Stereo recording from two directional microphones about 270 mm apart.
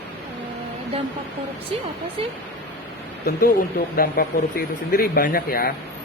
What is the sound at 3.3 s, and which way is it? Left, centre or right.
Speech, left.